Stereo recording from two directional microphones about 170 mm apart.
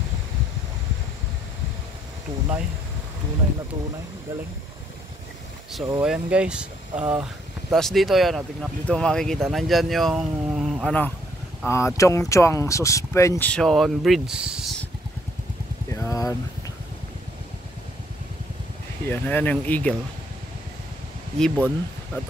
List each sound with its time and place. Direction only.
5.9 s speech: 5° right (ahead or behind)
11.6 s speech: 15° left (ahead or behind)
13.5 s speech: centre (ahead or behind)
15.9 s vehicle: 20° left (ahead or behind)
19.0 s speech: 10° left (ahead or behind)
21.4 s speech: 5° left (ahead or behind)